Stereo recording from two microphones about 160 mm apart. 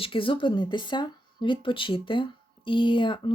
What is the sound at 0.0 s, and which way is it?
Speech, 35° left (ahead or behind).